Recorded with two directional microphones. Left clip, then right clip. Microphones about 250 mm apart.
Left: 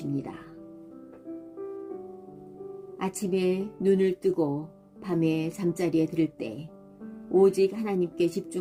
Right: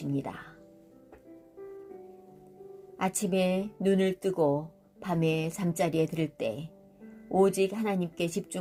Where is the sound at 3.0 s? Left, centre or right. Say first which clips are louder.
Even; right.